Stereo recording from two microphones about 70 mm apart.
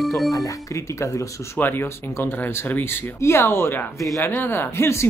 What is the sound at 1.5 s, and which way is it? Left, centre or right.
Speech, left.